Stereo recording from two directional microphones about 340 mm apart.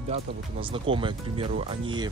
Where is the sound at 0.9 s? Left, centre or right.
Centre.